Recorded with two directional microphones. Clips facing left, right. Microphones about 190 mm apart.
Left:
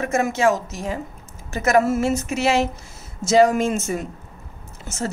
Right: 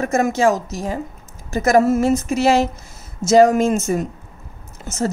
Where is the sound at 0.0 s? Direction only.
40° right (ahead or behind).